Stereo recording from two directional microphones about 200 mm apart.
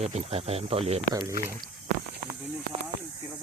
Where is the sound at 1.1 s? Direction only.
20° right (ahead or behind).